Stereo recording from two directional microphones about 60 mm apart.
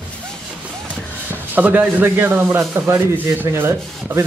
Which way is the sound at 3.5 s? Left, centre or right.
Right.